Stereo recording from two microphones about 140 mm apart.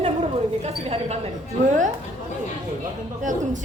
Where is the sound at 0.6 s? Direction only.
50° right (ahead or behind).